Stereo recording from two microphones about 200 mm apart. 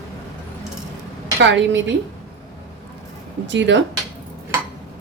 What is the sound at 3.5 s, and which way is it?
Speech, 65° right (ahead or behind).